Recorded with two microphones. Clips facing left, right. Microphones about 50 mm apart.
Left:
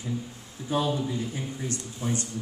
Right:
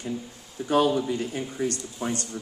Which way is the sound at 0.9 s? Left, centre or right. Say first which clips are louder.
Right 3 dB; right.